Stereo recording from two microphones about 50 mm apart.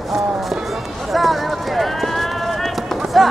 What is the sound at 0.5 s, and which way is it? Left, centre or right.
Horse, centre.